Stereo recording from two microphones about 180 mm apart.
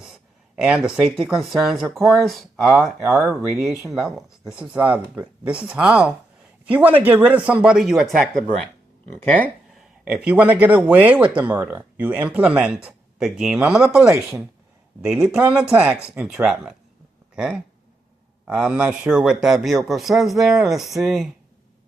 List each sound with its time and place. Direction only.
0.0 s speech: 5° right (ahead or behind)
10.0 s speech: 5° right (ahead or behind)